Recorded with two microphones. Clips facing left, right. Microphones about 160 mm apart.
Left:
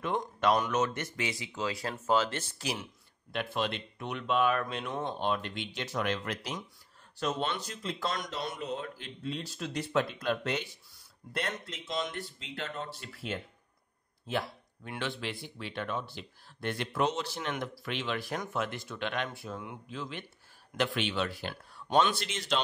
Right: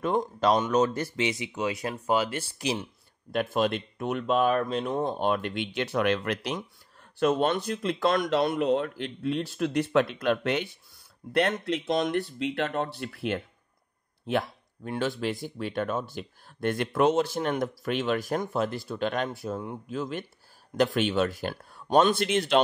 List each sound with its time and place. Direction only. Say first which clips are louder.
0.0 s speech: right 5 dB; 40° right (ahead or behind)
1.2 s speech: right 5 dB; 20° right (ahead or behind)
2.6 s speech: right 7 dB; 25° right (ahead or behind)
3.3 s speech: right 7 dB; 45° right (ahead or behind)
5.2 s speech: right 5 dB; 55° right (ahead or behind)
7.2 s speech: right 9 dB; 55° right (ahead or behind)
14.9 s speech: right 8 dB; 40° right (ahead or behind); by 22.6 s 55° right (ahead or behind)